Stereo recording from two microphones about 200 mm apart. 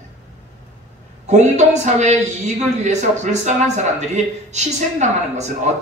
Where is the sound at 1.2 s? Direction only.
35° right (ahead or behind).